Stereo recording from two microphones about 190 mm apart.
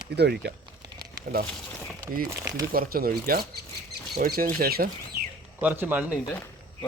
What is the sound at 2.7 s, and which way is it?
Speech, 50° right (ahead or behind).